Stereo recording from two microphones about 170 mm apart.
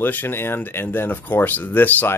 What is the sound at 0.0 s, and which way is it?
Speech, 10° left (ahead or behind).